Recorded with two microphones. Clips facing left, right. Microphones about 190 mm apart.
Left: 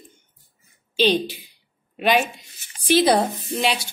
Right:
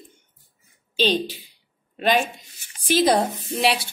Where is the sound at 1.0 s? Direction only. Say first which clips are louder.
Left 2 dB; 10° left (ahead or behind).